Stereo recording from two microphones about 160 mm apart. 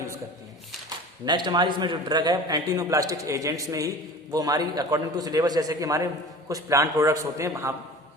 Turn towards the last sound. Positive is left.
turn(degrees=-15)  # may be behind; listen again after turning